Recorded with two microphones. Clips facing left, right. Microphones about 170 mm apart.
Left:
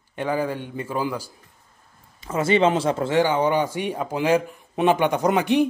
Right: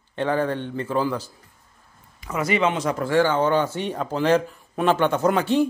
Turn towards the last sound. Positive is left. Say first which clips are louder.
# even
turn(degrees=15)  # may be behind; listen again after turning